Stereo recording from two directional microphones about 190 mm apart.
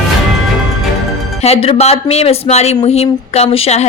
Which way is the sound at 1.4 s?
35° left (ahead or behind).